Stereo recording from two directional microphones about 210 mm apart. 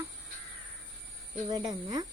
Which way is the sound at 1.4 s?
20° right (ahead or behind).